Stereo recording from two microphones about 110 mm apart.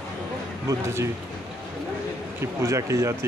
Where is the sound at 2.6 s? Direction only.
25° right (ahead or behind).